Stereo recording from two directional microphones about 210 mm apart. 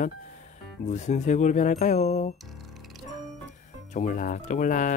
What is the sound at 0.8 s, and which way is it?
Speech, 35° left (ahead or behind).